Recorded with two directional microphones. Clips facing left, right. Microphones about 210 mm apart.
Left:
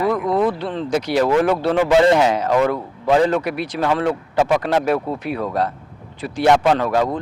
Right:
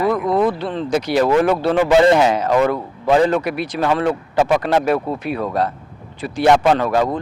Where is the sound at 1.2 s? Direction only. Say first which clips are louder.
Right 1 dB; 25° right (ahead or behind).